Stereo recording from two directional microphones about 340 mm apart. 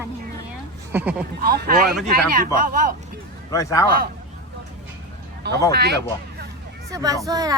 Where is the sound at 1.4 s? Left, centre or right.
Right.